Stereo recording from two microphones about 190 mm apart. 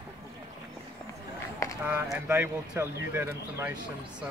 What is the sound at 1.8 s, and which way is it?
Speech, 10° right (ahead or behind).